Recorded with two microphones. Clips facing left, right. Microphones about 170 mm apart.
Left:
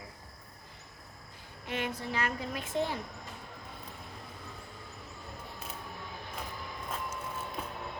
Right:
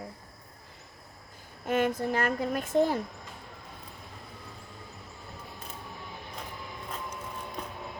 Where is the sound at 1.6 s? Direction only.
45° right (ahead or behind).